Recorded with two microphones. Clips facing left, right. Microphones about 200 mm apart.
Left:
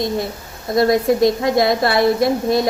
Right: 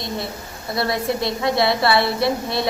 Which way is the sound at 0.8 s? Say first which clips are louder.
Left 9 dB; 45° left (ahead or behind).